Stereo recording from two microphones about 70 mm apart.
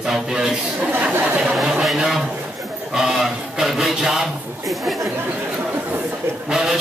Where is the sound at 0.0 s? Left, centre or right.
Centre.